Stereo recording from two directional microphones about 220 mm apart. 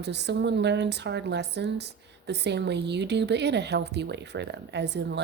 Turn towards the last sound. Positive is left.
turn(degrees=-50)  # may be behind; listen again after turning